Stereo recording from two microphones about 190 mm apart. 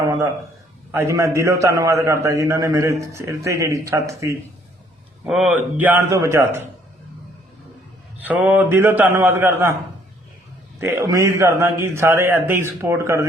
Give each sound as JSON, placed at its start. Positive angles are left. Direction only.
{"t": 0.0, "sound": "a man's voice", "side_deg": -15}
{"t": 5.2, "sound": "a man's voice", "side_deg": -5}
{"t": 8.2, "sound": "a man's voice", "side_deg": -10}
{"t": 10.8, "sound": "a man's voice", "side_deg": -15}